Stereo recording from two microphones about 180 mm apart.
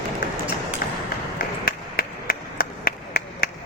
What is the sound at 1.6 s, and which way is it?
Clapping, 55° left (ahead or behind).